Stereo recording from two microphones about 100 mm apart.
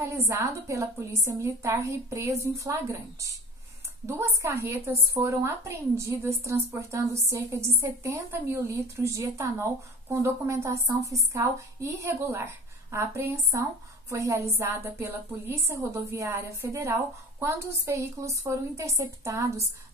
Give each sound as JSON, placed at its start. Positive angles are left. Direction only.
{"t": 0.3, "sound": "a woman's voice", "side_deg": -30}